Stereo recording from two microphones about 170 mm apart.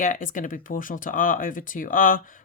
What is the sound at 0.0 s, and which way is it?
Speech, 50° left (ahead or behind).